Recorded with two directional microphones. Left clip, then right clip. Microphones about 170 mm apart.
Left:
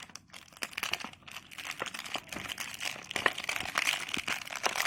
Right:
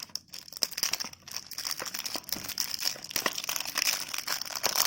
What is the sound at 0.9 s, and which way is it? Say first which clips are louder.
Crumpling: right 2 dB; 25° right (ahead or behind).